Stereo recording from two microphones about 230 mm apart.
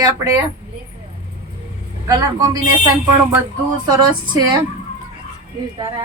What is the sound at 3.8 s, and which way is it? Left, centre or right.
Speech, centre.